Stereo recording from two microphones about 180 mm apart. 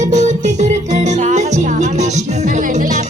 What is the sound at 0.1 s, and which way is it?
Music, 40° right (ahead or behind).